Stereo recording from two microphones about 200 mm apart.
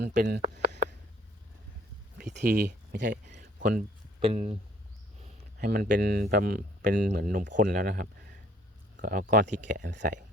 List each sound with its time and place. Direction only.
0.0 s speech: 45° right (ahead or behind)
0.5 s a sound: 60° right (ahead or behind)
2.6 s speech: 50° right (ahead or behind); by 4.5 s 30° right (ahead or behind)
5.2 s speech: 45° right (ahead or behind)